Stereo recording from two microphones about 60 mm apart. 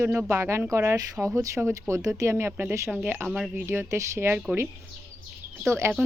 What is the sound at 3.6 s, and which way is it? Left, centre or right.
Speech, right.